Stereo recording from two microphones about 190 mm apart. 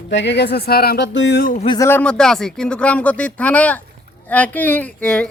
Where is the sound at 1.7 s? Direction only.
10° left (ahead or behind).